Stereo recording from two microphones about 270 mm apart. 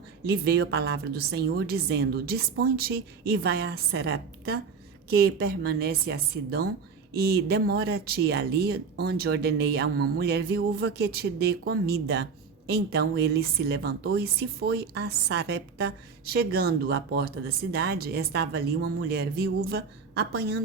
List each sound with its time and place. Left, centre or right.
0.3 s speech: right